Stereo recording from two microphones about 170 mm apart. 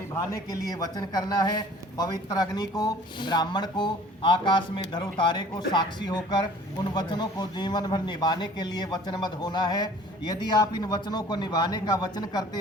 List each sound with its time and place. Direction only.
0.3 s a man's voice: 20° left (ahead or behind)